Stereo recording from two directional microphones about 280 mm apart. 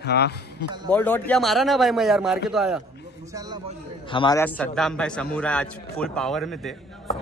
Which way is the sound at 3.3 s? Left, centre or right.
Centre.